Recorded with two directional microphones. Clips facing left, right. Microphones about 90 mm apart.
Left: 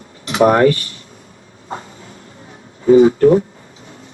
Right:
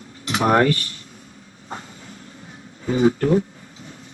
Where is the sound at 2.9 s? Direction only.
40° left (ahead or behind).